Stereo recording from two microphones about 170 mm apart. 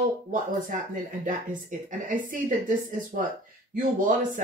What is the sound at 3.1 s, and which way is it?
Speech, 60° right (ahead or behind).